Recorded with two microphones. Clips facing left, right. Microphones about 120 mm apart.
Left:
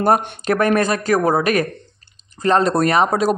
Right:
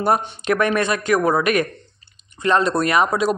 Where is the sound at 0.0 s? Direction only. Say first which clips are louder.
Left 3 dB; 40° left (ahead or behind).